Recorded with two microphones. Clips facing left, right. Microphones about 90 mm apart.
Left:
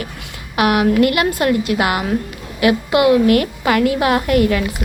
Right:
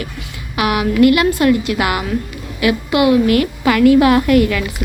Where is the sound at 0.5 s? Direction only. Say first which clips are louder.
Left 2 dB; 45° left (ahead or behind).